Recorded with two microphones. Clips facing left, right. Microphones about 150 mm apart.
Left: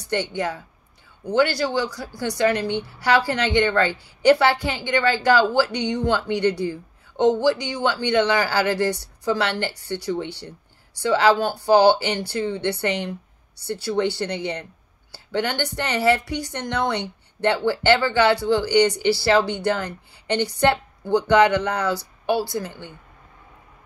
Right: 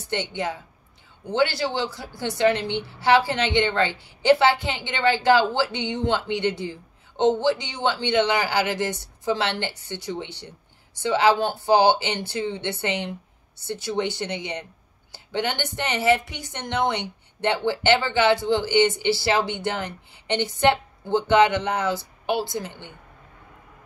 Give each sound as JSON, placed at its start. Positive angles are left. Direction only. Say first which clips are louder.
{"t": 0.1, "sound": "a woman's voice", "louder": "left 3 dB", "side_deg": -20}